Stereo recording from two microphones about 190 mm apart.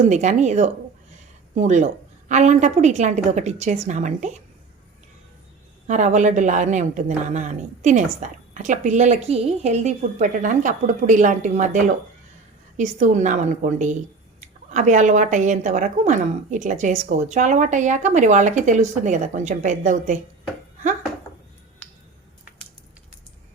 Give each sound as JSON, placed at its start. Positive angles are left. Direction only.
{"t": 0.0, "sound": "a woman's voice", "side_deg": -40}
{"t": 5.9, "sound": "a woman's voice", "side_deg": -40}